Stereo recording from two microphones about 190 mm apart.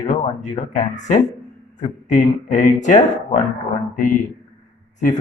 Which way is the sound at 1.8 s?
40° left (ahead or behind).